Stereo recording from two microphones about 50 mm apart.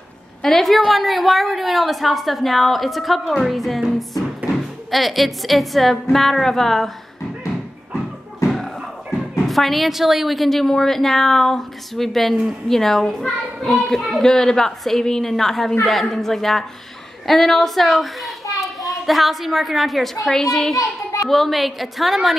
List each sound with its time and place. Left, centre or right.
0.4 s a woman's voice: centre
4.9 s a woman's voice: centre
9.5 s a woman's voice: centre